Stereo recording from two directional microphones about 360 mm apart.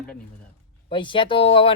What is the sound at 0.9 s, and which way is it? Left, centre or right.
Speech, centre.